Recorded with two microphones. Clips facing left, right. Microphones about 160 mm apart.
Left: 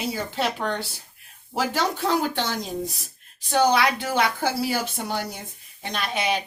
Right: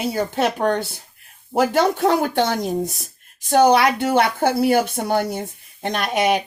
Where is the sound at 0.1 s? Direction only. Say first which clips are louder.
Right 6 dB; 50° right (ahead or behind).